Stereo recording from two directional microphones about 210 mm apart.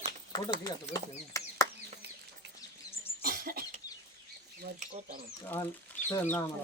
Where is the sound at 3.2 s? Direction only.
45° right (ahead or behind).